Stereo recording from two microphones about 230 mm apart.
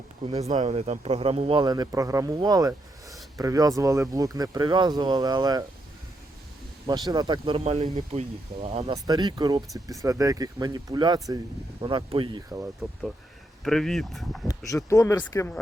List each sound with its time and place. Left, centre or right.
0.3 s speech: right
6.8 s speech: centre
13.7 s speech: centre
14.7 s speech: centre